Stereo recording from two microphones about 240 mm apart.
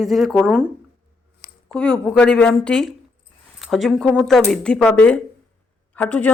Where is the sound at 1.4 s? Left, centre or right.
Left.